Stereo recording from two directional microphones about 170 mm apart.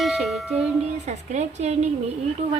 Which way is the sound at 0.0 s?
Centre (ahead or behind).